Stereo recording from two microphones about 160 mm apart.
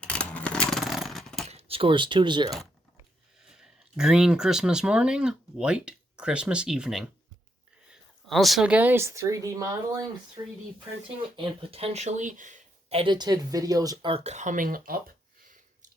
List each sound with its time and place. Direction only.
0.0 s a sound: 5° left (ahead or behind)
1.5 s speech: 40° right (ahead or behind)
3.5 s speech: 5° right (ahead or behind)
8.3 s speech: centre (ahead or behind); by 10.4 s 25° right (ahead or behind)
11.3 s speech: 35° right (ahead or behind); by 13.0 s 50° right (ahead or behind)
13.0 s speech: 30° right (ahead or behind)
14.1 s a sound: 45° right (ahead or behind); by 15.9 s 60° right (ahead or behind)